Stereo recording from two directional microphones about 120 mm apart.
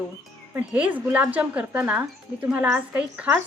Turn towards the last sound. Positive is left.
turn(degrees=-15)  # may be behind; listen again after turning